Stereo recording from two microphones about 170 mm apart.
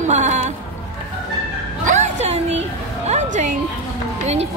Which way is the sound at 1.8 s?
45° right (ahead or behind).